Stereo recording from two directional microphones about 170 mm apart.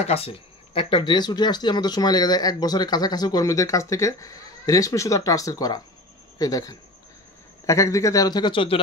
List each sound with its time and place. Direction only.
0.0 s speech: 35° left (ahead or behind)